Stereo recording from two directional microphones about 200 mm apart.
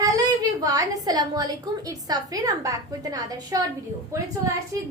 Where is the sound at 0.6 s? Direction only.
20° right (ahead or behind).